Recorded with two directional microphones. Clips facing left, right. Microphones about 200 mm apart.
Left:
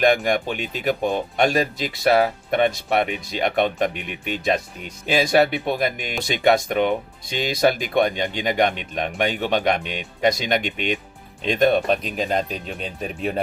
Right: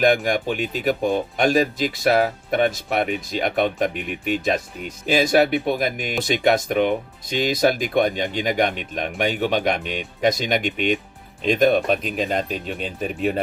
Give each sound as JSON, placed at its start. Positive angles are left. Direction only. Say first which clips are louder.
{"t": 0.0, "sound": "speech", "louder": "even", "side_deg": 0}